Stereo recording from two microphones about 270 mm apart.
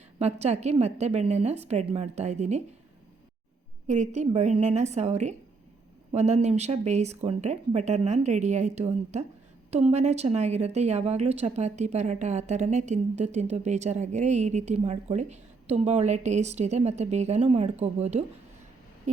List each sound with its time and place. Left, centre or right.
0.2 s a woman's voice: right
3.8 s a woman's voice: right
19.1 s a sound: right